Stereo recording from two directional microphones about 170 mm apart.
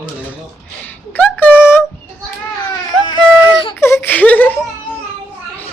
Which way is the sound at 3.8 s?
15° left (ahead or behind).